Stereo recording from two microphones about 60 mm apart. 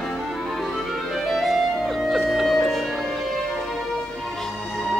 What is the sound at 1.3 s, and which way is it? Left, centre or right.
Music, centre.